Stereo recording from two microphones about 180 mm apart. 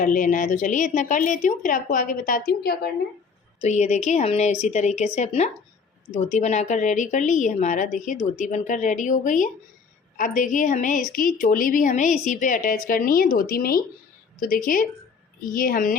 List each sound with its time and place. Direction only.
0.0 s a woman's voice: 45° left (ahead or behind)
3.6 s a woman's voice: 40° left (ahead or behind)